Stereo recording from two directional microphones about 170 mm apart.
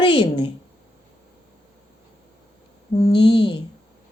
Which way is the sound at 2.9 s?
30° left (ahead or behind).